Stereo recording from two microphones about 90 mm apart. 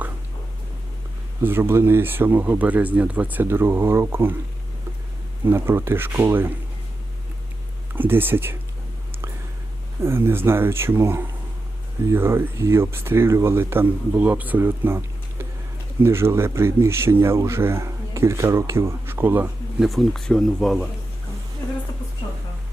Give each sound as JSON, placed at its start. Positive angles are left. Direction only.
{"t": 1.4, "sound": "speech", "side_deg": -25}
{"t": 5.5, "sound": "speech", "side_deg": -25}
{"t": 7.9, "sound": "speech", "side_deg": -20}
{"t": 10.0, "sound": "speech", "side_deg": -25}
{"t": 19.8, "sound": "speech", "side_deg": 0}
{"t": 21.6, "sound": "a sound", "side_deg": 45}